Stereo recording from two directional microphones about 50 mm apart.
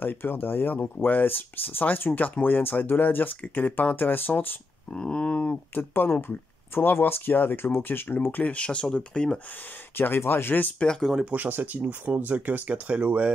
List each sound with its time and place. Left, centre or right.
0.0 s speech: left
4.9 s speech: centre
5.8 s speech: left
8.3 s speech: left
9.9 s speech: left
10.8 s speech: centre
11.2 s speech: right